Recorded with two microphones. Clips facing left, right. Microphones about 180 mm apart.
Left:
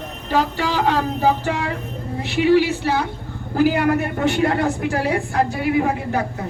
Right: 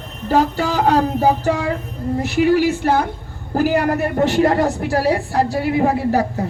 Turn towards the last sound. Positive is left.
turn(degrees=-35)  # may be behind; listen again after turning